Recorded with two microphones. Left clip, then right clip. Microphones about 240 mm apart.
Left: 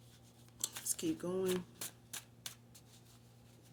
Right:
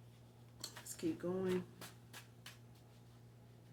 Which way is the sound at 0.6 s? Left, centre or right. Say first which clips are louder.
Left 3 dB; left.